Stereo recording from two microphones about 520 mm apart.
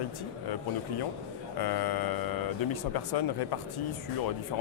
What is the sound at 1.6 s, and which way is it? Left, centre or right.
Mantra, left.